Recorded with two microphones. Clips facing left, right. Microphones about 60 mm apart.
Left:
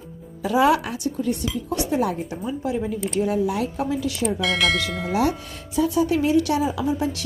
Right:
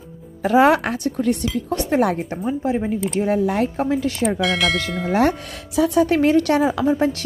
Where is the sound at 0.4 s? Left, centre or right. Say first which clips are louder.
Right 4 dB; right.